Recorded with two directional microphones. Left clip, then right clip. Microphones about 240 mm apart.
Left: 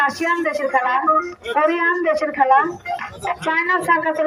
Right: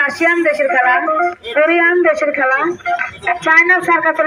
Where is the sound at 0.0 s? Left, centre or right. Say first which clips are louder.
Right 5 dB; left.